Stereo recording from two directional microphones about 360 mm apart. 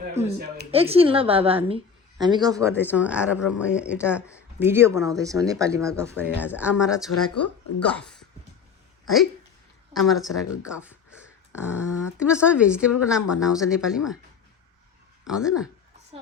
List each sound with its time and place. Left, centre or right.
0.1 s speech: right
0.7 s a woman's voice: centre
7.1 s speech: left
7.9 s speech: centre
9.9 s a woman's voice: centre
15.3 s a woman's voice: centre